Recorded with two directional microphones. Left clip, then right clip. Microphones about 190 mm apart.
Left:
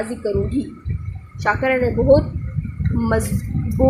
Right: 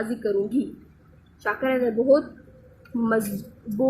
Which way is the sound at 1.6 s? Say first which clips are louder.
Left 4 dB; 20° left (ahead or behind).